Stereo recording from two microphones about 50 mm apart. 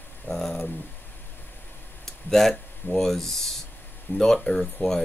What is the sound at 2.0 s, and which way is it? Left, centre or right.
Speech, centre.